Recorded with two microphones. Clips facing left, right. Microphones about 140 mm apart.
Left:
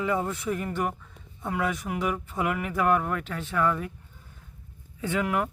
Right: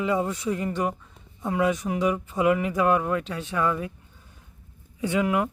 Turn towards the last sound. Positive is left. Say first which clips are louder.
# right 3 dB
turn(degrees=-20)  # may be behind; listen again after turning